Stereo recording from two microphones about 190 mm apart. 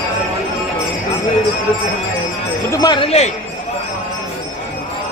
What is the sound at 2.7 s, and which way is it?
Speech, 20° left (ahead or behind).